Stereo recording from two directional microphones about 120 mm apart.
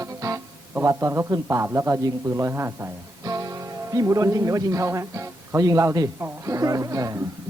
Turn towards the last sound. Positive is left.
turn(degrees=-25)  # may be behind; listen again after turning